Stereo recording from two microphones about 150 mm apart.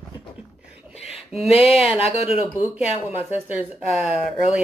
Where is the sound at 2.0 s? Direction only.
40° left (ahead or behind).